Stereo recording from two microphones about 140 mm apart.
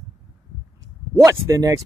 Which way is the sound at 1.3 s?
25° right (ahead or behind).